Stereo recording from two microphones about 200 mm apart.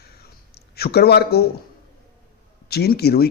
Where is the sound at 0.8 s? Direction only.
55° left (ahead or behind).